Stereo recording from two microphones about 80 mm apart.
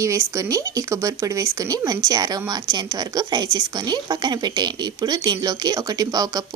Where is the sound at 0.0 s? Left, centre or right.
Right.